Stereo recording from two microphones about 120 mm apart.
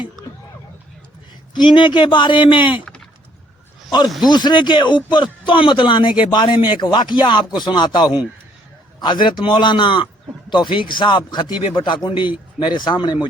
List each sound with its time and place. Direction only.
1.5 s a man's voice: 40° left (ahead or behind)
4.3 s a man's voice: 35° left (ahead or behind)
8.0 s a man's voice: 10° right (ahead or behind)
9.0 s a man's voice: 40° left (ahead or behind)